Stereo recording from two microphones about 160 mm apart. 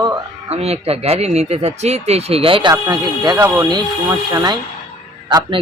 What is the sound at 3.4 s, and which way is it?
A man's voice, 20° right (ahead or behind).